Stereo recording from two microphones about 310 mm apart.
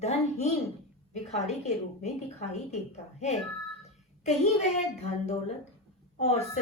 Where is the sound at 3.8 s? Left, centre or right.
Left.